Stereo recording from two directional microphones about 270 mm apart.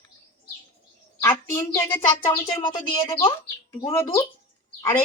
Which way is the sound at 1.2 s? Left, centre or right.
Centre.